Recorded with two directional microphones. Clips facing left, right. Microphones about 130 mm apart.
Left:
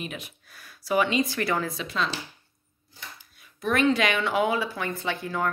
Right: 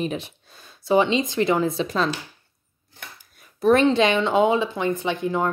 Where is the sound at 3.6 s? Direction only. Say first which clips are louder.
Right 6 dB; 30° right (ahead or behind).